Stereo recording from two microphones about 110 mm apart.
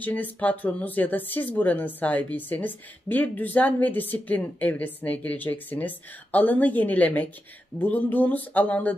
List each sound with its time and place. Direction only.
0.0 s speech: 15° left (ahead or behind)